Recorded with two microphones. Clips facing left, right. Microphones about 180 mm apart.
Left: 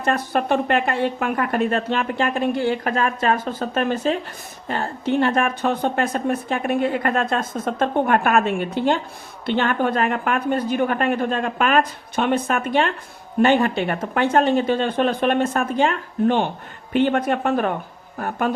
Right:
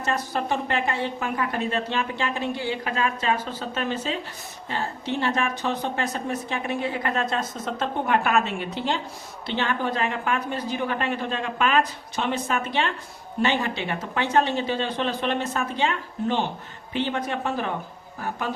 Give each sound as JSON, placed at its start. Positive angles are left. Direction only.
{"t": 0.0, "sound": "a woman's voice", "side_deg": 60}